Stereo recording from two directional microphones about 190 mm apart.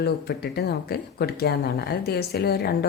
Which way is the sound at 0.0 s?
60° left (ahead or behind).